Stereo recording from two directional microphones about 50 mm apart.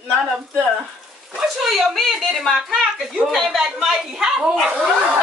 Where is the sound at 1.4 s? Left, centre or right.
Centre.